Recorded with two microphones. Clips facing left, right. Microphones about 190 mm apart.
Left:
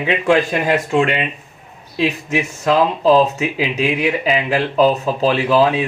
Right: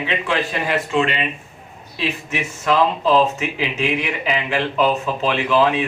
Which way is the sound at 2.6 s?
40° left (ahead or behind).